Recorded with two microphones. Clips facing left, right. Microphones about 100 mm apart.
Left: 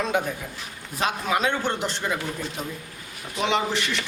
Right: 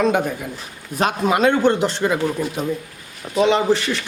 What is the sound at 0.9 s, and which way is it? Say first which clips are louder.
A man's voice: right 6 dB; 60° right (ahead or behind).